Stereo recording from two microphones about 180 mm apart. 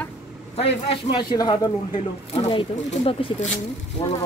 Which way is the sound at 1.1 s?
25° left (ahead or behind).